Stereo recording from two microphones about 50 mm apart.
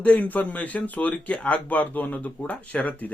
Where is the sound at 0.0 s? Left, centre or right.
Left.